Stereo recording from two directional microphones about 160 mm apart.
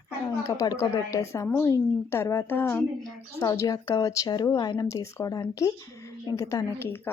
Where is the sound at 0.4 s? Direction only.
20° left (ahead or behind).